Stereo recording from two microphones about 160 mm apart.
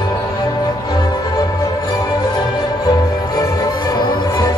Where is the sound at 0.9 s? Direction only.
25° left (ahead or behind).